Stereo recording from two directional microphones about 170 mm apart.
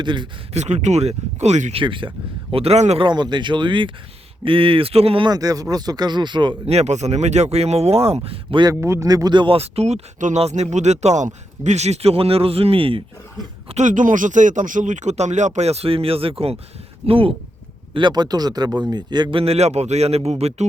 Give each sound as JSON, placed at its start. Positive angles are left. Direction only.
{"t": 0.0, "sound": "speech", "side_deg": -30}
{"t": 0.5, "sound": "speech", "side_deg": -40}
{"t": 1.8, "sound": "speech", "side_deg": -30}
{"t": 8.7, "sound": "speech", "side_deg": -15}
{"t": 13.7, "sound": "speech", "side_deg": -45}